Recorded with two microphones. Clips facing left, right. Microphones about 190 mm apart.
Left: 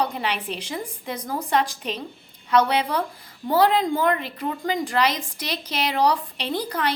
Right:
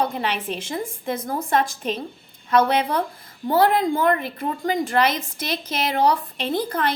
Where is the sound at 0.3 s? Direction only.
50° right (ahead or behind).